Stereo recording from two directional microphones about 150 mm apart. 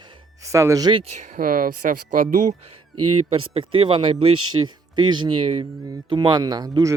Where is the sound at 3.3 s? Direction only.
40° right (ahead or behind).